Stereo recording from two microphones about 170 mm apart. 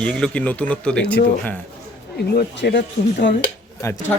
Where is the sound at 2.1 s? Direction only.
70° left (ahead or behind); by 3.3 s 90° left.